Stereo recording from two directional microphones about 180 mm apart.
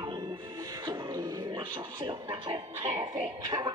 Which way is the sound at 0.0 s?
20° right (ahead or behind).